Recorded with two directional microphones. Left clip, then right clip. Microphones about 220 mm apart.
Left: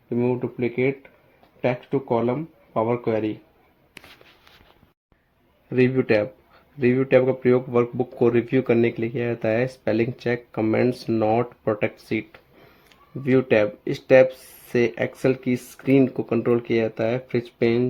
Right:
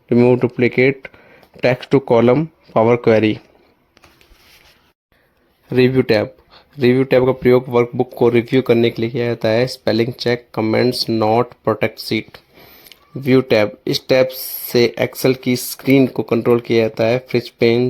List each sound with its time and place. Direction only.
0.1 s speech: 55° right (ahead or behind)
5.6 s speech: 35° right (ahead or behind)